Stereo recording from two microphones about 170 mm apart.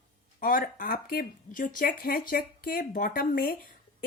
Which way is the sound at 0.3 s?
55° left (ahead or behind).